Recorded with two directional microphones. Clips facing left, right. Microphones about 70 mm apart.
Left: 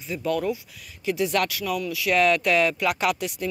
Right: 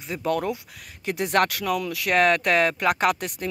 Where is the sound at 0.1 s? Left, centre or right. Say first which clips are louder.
Even; right.